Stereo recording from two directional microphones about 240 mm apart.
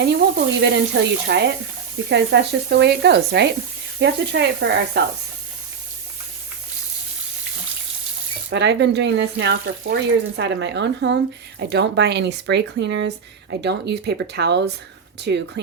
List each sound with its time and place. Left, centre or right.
0.0 s speech: right
8.4 s speech: right